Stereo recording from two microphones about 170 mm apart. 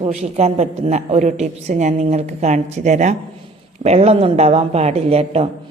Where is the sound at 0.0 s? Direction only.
40° right (ahead or behind).